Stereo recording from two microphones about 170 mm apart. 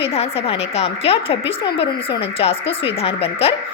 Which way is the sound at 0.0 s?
35° left (ahead or behind).